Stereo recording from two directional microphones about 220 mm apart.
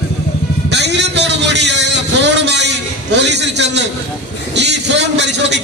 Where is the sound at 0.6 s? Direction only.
50° right (ahead or behind).